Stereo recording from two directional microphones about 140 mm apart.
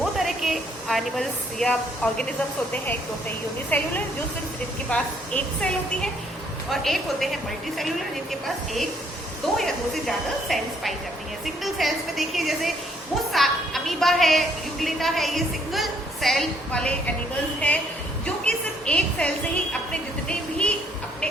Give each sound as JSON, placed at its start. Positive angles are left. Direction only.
{"t": 0.0, "sound": "a sound", "side_deg": 0}
{"t": 3.7, "sound": "a woman's voice", "side_deg": 15}
{"t": 4.9, "sound": "a woman's voice", "side_deg": 5}
{"t": 18.9, "sound": "a woman's voice", "side_deg": 10}
{"t": 19.9, "sound": "music", "side_deg": 10}